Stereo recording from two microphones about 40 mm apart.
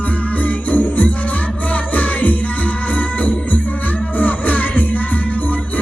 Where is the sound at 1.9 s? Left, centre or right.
Left.